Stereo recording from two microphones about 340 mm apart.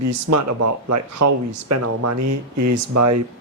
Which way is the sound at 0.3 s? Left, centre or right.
Right.